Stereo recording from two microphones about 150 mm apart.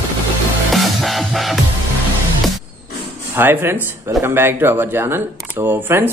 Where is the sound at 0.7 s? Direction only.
Centre (ahead or behind).